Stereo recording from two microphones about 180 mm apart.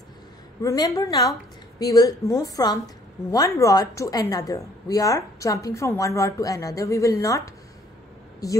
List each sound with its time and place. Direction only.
0.6 s a woman's voice: 20° left (ahead or behind)